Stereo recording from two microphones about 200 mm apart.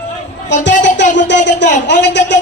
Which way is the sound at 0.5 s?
65° left (ahead or behind).